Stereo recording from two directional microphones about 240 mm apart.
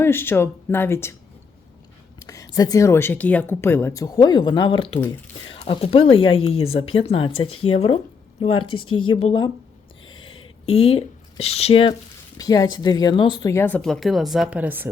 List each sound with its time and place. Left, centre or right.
0.0 s speech: centre
2.1 s speech: centre